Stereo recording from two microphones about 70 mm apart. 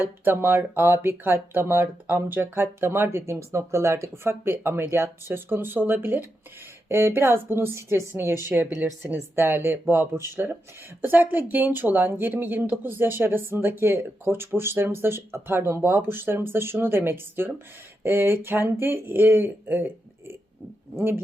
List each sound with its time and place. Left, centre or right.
0.0 s speech: right